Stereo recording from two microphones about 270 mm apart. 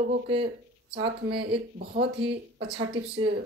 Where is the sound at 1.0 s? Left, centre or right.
Right.